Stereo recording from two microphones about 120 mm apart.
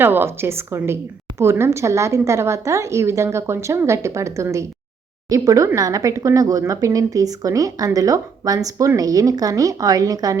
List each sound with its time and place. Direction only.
0.0 s speech: 20° right (ahead or behind)